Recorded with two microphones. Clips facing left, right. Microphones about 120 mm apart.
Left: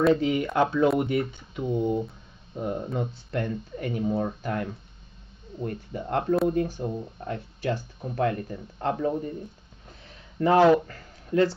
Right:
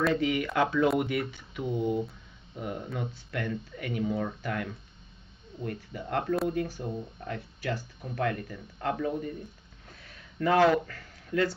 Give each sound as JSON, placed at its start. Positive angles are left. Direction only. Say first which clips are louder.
{"t": 0.1, "sound": "speech", "louder": "left 4 dB", "side_deg": 30}
{"t": 7.2, "sound": "speech", "louder": "left 4 dB", "side_deg": 30}
{"t": 9.8, "sound": "a sound", "louder": "left 2 dB", "side_deg": 25}
{"t": 10.6, "sound": "speech", "louder": "left 5 dB", "side_deg": 25}